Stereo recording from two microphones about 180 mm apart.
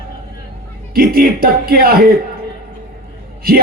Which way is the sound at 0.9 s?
55° right (ahead or behind).